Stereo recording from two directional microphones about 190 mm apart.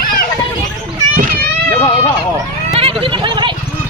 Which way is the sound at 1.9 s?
25° left (ahead or behind).